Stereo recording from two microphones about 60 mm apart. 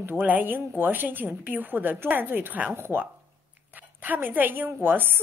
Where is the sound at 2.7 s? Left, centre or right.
Right.